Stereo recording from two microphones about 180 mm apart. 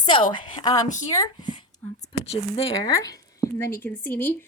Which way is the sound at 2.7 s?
20° left (ahead or behind).